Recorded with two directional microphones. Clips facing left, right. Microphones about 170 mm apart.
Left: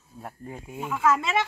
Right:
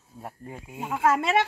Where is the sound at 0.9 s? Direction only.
55° right (ahead or behind).